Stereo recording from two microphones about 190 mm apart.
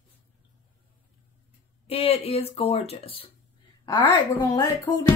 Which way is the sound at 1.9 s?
30° left (ahead or behind).